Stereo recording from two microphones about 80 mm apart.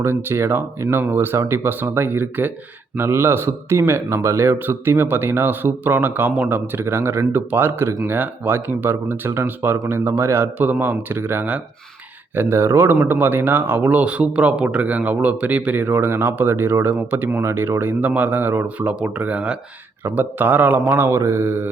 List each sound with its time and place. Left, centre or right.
0.0 s speech: right
9.9 s mantra: right
10.6 s speech: right
12.3 s mantra: right
13.1 s speech: right
20.8 s mantra: right